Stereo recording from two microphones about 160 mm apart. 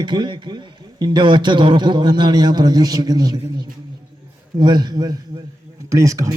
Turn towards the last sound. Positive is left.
turn(degrees=-20)  # may be behind; listen again after turning